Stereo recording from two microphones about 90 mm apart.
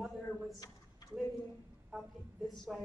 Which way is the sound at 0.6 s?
40° left (ahead or behind).